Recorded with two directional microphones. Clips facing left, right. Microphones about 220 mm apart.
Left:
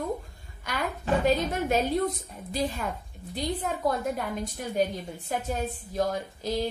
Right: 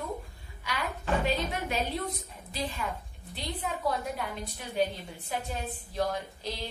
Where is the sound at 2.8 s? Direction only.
45° left (ahead or behind).